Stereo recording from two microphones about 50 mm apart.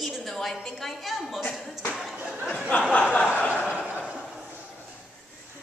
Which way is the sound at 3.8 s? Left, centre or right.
Right.